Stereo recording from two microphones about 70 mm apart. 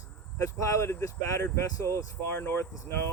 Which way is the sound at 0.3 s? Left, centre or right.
Left.